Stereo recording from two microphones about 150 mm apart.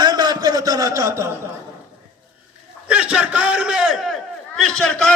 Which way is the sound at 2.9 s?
10° right (ahead or behind).